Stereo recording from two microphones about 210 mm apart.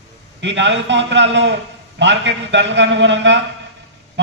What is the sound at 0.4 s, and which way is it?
A man's voice, 60° right (ahead or behind).